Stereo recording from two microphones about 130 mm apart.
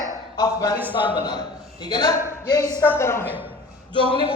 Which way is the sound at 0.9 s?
40° left (ahead or behind).